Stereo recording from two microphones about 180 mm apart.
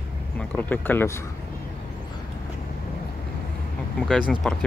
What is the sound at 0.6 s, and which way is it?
Speech, 10° left (ahead or behind).